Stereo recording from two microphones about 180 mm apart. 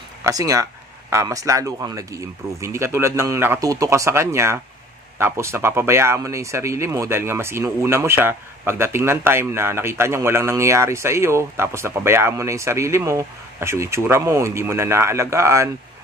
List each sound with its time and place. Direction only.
0.2 s speech: 20° right (ahead or behind)